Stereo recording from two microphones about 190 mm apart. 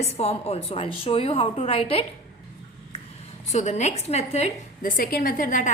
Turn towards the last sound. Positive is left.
turn(degrees=45)  # may be behind; listen again after turning